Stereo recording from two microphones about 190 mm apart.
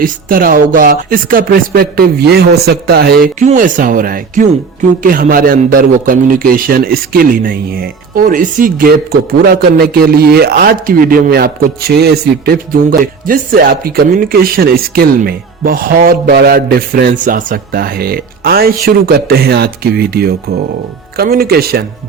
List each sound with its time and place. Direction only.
0.0 s speech: 50° right (ahead or behind)
3.3 s speech: 40° right (ahead or behind)